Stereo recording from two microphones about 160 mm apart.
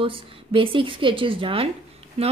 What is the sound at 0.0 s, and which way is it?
Speech, 35° right (ahead or behind).